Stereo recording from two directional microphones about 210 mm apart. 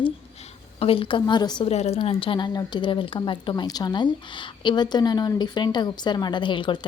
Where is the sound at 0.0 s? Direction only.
30° left (ahead or behind).